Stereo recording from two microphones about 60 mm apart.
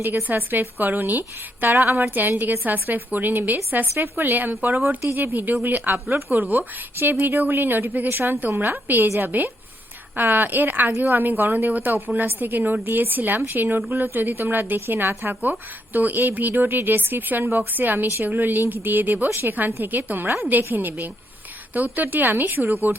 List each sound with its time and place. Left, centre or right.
0.0 s a woman's voice: right
6.9 s a woman's voice: right